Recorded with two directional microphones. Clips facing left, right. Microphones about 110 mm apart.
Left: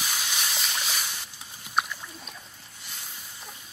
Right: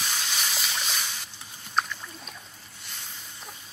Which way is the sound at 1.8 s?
5° left (ahead or behind).